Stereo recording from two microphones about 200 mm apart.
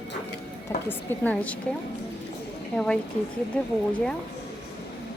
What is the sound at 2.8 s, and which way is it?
Speech, 5° left (ahead or behind).